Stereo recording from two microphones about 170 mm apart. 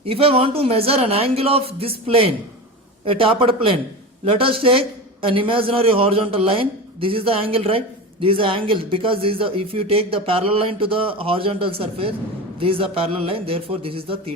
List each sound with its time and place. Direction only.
0.0 s a man's voice: 35° right (ahead or behind)